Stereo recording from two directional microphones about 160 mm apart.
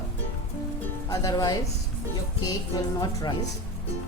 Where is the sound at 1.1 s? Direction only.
20° left (ahead or behind).